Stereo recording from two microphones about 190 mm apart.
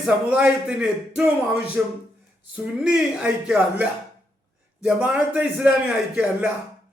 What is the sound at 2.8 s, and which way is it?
A man's voice, 5° right (ahead or behind).